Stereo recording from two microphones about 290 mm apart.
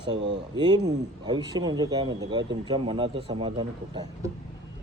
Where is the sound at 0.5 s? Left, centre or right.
Centre.